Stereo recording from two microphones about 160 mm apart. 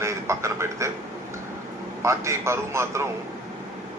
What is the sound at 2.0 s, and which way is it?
A man's voice, 15° right (ahead or behind).